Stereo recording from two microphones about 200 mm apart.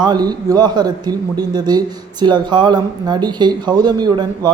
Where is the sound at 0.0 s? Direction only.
20° right (ahead or behind).